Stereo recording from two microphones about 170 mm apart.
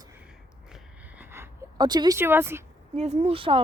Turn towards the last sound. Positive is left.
turn(degrees=-30)  # may be behind; listen again after turning